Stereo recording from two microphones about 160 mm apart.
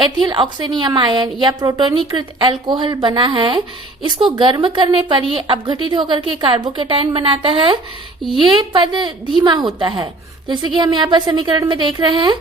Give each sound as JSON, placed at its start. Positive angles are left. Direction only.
{"t": 0.0, "sound": "a woman's voice", "side_deg": -30}